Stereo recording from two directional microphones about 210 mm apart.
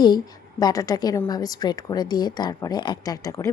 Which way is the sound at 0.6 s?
15° left (ahead or behind).